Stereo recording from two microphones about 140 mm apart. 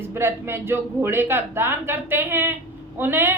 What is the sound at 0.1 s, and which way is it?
A woman's voice, 15° right (ahead or behind).